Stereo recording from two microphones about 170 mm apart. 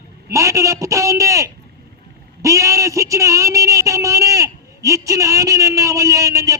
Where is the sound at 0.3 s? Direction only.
20° right (ahead or behind).